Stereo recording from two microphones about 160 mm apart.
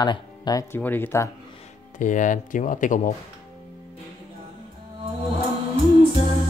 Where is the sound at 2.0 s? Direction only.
55° left (ahead or behind).